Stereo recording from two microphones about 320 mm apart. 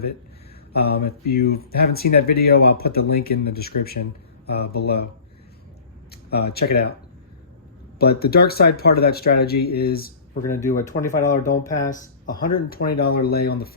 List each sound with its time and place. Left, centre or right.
0.7 s speech: left
6.1 s speech: left
7.9 s speech: left